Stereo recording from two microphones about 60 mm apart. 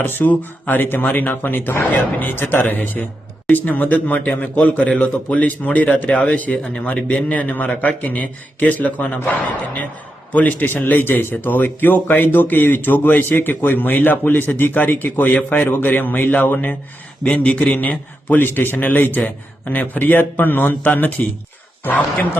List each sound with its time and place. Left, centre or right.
0.0 s a man's voice: left
10.3 s a man's voice: left